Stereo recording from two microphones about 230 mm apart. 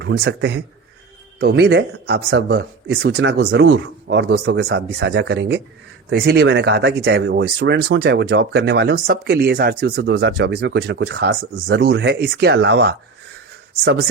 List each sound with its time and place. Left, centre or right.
0.0 s speech: right